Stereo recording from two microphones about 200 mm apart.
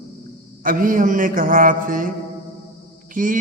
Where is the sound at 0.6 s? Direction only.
45° right (ahead or behind).